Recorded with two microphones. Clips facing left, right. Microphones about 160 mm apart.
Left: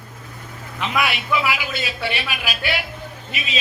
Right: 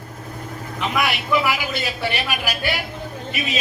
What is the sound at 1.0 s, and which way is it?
A man's voice, 45° right (ahead or behind).